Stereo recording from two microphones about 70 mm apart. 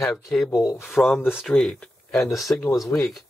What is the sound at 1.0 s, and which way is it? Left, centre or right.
Speech, centre.